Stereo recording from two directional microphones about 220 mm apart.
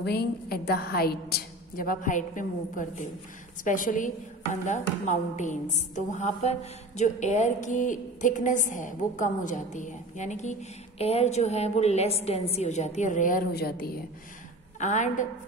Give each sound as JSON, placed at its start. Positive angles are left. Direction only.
{"t": 0.0, "sound": "a woman's voice", "side_deg": 45}